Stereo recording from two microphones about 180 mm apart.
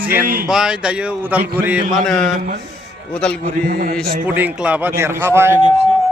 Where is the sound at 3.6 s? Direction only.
50° right (ahead or behind).